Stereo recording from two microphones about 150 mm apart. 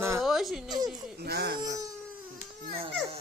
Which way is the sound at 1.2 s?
90° right.